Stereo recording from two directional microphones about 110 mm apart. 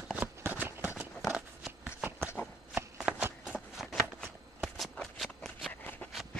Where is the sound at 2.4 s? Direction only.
20° left (ahead or behind).